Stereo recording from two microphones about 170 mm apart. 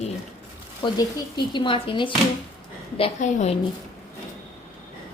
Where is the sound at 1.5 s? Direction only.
30° left (ahead or behind).